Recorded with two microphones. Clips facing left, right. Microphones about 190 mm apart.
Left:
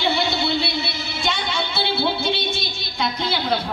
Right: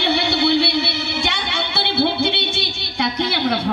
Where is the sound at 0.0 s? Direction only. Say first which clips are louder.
Right 3 dB; 65° right (ahead or behind).